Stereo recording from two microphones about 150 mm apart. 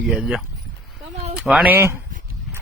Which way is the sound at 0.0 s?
5° right (ahead or behind).